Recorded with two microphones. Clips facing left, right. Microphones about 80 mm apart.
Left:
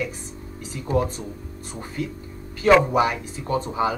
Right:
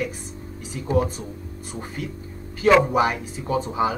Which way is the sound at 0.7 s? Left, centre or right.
Right.